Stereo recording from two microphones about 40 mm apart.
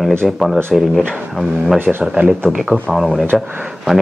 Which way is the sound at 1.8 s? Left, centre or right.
Right.